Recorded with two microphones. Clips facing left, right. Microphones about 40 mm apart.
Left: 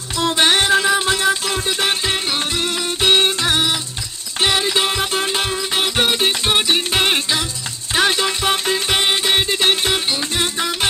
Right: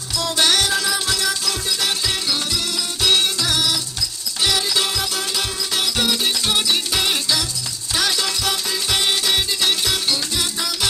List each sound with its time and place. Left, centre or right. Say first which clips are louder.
0.2 s music: left 3 dB; left